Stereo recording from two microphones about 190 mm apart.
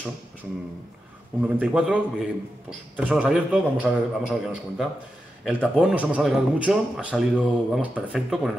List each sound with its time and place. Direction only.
1.4 s a man's voice: 5° right (ahead or behind)